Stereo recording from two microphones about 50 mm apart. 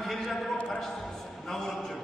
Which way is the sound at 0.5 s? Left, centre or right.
Left.